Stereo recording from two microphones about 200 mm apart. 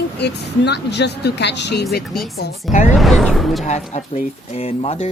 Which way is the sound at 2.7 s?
40° left (ahead or behind).